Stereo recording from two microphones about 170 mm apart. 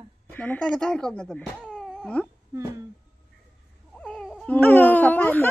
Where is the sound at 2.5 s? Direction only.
25° right (ahead or behind).